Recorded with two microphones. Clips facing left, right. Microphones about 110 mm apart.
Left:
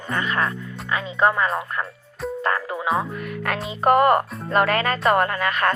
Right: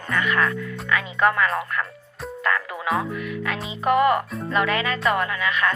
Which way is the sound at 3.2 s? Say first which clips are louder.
Left 1 dB; 50° left (ahead or behind).